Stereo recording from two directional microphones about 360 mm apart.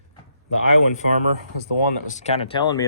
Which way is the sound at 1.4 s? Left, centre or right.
Right.